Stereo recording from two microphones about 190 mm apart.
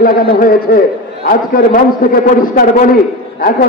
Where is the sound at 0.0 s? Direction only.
50° left (ahead or behind).